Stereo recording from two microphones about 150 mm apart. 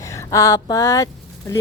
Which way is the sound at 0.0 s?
20° left (ahead or behind).